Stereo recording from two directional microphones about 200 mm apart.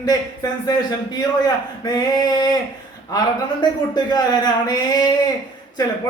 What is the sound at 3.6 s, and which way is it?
Speech, 20° left (ahead or behind).